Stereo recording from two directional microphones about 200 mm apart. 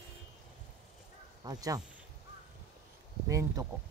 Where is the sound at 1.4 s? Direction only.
15° right (ahead or behind).